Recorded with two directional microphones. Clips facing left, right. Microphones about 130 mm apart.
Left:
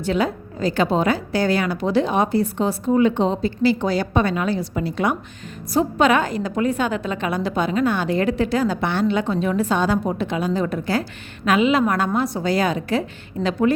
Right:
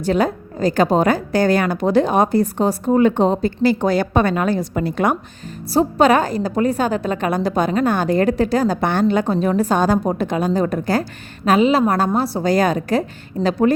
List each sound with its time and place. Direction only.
0.0 s a woman's voice: 45° right (ahead or behind)
5.7 s a woman's voice: 35° right (ahead or behind)